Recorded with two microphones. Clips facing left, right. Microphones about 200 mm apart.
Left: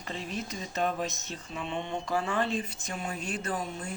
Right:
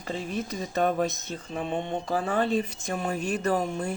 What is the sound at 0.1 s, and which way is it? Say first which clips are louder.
Speech: right 5 dB; 50° right (ahead or behind).